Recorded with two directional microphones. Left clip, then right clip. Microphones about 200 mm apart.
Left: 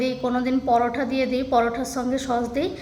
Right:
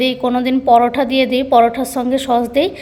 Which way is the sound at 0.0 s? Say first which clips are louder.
Right 8 dB; 20° right (ahead or behind).